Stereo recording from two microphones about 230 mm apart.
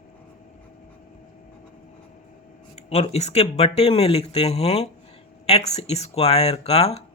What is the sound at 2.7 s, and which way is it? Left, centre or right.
Speech, left.